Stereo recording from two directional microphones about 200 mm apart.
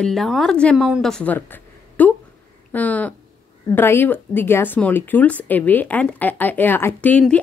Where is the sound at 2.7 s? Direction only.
10° left (ahead or behind).